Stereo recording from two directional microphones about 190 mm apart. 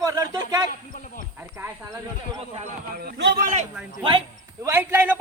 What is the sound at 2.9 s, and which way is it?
Speech, 55° right (ahead or behind).